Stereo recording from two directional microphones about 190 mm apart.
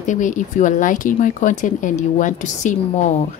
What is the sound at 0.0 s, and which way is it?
A woman's voice, 40° left (ahead or behind).